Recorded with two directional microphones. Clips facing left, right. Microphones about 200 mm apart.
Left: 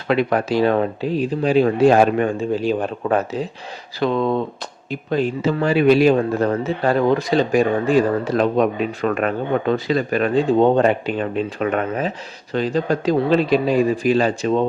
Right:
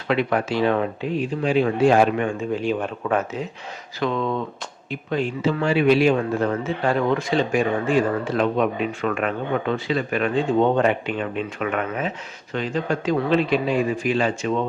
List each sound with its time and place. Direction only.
0.1 s speech: 40° left (ahead or behind)